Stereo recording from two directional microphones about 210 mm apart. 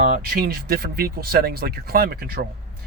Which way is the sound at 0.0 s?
45° right (ahead or behind).